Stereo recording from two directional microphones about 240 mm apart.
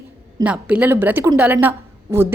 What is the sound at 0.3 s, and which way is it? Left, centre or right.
A woman's voice, centre.